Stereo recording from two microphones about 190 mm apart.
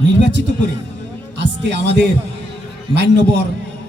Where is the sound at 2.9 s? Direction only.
65° right (ahead or behind).